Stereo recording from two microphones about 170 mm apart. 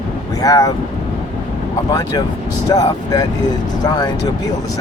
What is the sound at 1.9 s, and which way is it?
Speech, 20° left (ahead or behind).